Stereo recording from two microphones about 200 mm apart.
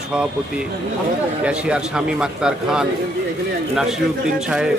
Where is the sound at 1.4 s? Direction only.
5° right (ahead or behind).